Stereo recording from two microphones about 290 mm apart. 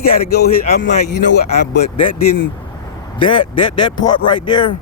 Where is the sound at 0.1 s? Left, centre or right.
Left.